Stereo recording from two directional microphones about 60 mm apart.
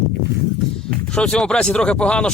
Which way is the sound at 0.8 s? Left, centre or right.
Centre.